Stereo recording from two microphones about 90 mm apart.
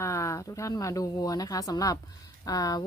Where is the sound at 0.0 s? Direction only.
35° left (ahead or behind).